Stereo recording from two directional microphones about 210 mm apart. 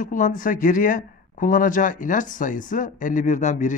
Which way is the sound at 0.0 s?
40° left (ahead or behind).